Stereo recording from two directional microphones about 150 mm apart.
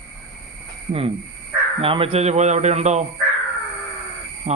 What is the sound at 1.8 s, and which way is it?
A man's voice, 35° right (ahead or behind).